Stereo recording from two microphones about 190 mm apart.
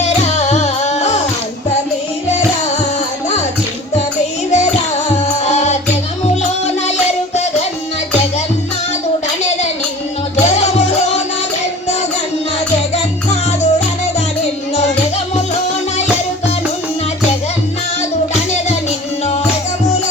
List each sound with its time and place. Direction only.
0.0 s music: 35° left (ahead or behind)
4.5 s music: 35° left (ahead or behind)
10.4 s music: 35° left (ahead or behind)
12.5 s music: 35° left (ahead or behind)
18.9 s music: 35° left (ahead or behind)